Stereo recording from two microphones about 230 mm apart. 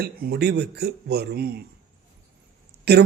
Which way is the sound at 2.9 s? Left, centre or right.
Right.